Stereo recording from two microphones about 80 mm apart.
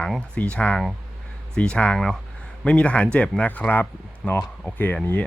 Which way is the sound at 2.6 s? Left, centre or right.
Centre.